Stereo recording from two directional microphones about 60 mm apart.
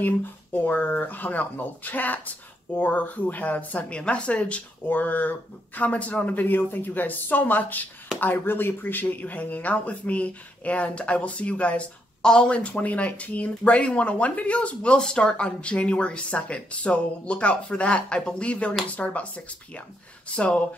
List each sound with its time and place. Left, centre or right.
0.0 s speech: left